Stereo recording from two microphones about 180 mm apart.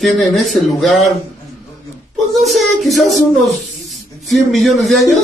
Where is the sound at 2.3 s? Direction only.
Centre (ahead or behind).